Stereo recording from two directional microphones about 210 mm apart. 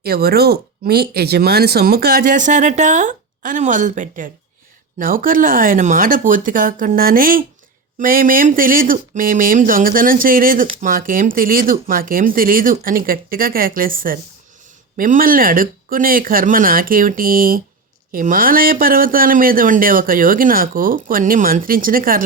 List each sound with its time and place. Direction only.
0.0 s a man's voice: 45° right (ahead or behind)